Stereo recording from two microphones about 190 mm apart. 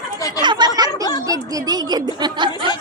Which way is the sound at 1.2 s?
20° right (ahead or behind).